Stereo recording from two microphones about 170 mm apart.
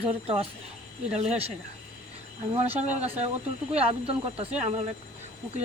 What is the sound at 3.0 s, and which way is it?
Speech, 40° right (ahead or behind).